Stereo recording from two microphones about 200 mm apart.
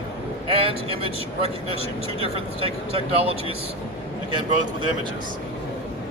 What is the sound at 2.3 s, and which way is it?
Speech, 30° right (ahead or behind).